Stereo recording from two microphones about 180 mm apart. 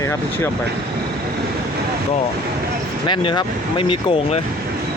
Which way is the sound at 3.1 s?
25° left (ahead or behind).